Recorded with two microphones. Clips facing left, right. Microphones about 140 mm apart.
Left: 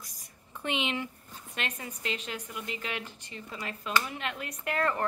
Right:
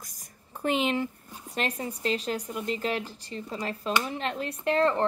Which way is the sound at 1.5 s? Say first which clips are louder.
Right 7 dB; 35° right (ahead or behind).